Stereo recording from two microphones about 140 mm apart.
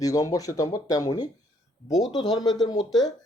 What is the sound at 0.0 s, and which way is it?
Speech, 25° left (ahead or behind).